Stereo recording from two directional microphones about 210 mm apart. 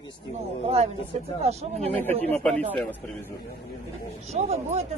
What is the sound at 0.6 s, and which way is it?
Speech, 30° right (ahead or behind).